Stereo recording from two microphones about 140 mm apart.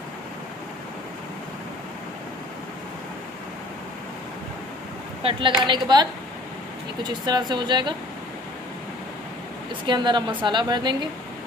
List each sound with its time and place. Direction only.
5.2 s a woman's voice: 35° right (ahead or behind)
9.8 s a woman's voice: 35° right (ahead or behind)